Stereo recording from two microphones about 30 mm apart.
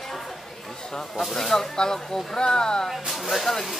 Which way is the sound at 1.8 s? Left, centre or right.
Left.